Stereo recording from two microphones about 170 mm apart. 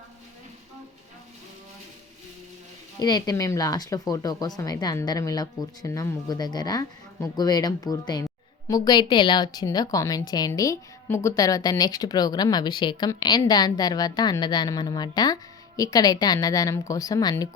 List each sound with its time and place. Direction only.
3.0 s speech: 25° left (ahead or behind)